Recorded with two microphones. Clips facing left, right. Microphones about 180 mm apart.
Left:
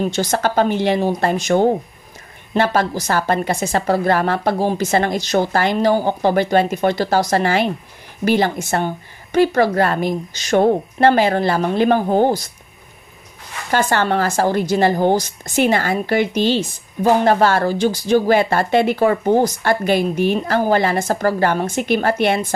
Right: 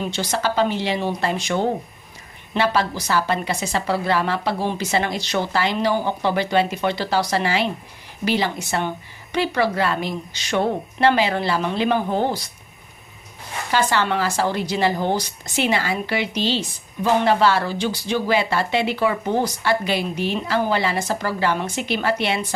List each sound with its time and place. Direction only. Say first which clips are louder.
0.0 s speech: left 5 dB; 45° left (ahead or behind)
13.7 s speech: left 3 dB; 50° left (ahead or behind)